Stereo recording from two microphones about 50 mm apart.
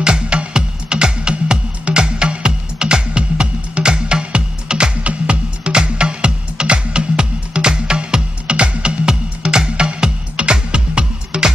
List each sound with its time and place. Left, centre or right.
0.0 s music: centre